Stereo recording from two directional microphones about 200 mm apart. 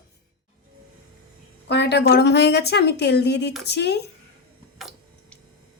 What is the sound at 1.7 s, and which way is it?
A woman's voice, 60° left (ahead or behind).